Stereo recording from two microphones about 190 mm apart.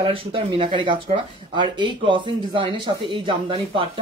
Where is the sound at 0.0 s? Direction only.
30° right (ahead or behind).